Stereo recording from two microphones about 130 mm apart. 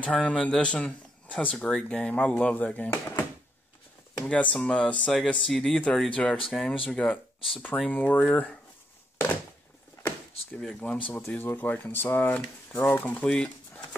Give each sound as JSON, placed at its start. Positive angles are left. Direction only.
{"t": 0.0, "sound": "speech", "side_deg": 10}
{"t": 4.3, "sound": "speech", "side_deg": 10}
{"t": 10.6, "sound": "speech", "side_deg": 5}